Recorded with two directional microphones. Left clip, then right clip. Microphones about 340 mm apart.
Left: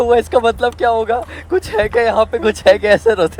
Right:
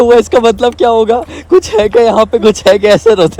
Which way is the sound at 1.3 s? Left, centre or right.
Right.